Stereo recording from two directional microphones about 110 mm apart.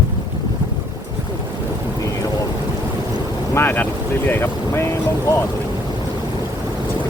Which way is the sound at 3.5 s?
20° left (ahead or behind).